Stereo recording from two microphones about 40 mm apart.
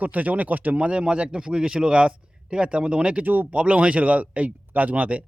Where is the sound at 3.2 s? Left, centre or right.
Right.